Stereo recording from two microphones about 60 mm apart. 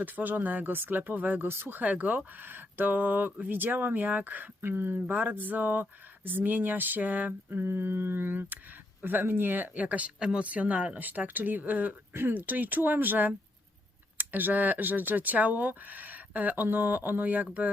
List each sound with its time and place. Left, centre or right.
0.0 s speech: right